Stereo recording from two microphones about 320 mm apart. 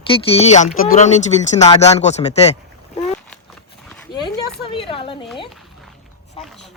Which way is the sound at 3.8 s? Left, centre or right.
Centre.